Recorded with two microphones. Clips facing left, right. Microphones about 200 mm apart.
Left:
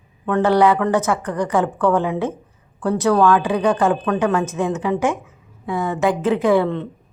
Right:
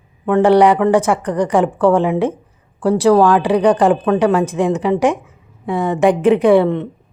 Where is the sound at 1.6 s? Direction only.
30° right (ahead or behind).